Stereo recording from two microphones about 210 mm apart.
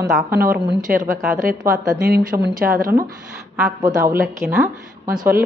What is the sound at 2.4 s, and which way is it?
Speech, 45° right (ahead or behind).